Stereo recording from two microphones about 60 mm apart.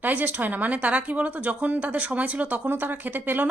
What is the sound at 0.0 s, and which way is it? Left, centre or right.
A woman's voice, right.